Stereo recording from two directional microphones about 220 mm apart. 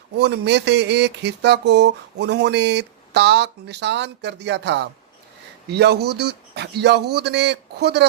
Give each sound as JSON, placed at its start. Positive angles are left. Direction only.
{"t": 0.2, "sound": "speech", "side_deg": -50}